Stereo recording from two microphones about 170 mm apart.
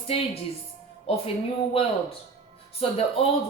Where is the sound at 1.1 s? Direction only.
35° left (ahead or behind).